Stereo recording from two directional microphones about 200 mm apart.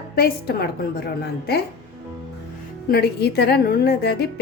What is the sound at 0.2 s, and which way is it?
Speech, 50° left (ahead or behind).